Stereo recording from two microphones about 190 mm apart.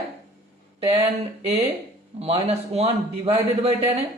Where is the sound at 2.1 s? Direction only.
30° right (ahead or behind).